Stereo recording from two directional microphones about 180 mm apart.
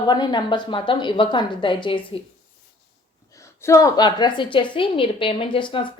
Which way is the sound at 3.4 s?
15° left (ahead or behind).